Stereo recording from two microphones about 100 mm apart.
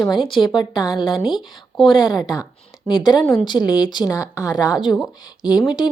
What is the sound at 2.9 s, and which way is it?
Speech, 45° left (ahead or behind).